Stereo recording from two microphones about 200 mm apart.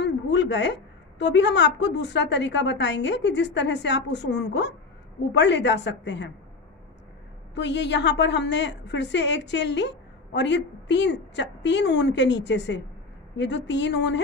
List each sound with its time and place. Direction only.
0.0 s a woman's voice: 60° left (ahead or behind)
7.5 s a woman's voice: 60° left (ahead or behind)